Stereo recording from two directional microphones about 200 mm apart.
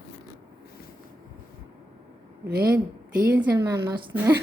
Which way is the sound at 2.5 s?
50° right (ahead or behind).